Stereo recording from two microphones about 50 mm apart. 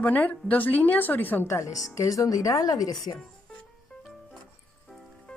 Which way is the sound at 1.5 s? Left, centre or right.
Left.